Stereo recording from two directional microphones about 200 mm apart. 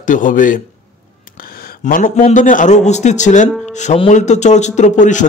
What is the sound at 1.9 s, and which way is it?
Speech, 45° left (ahead or behind).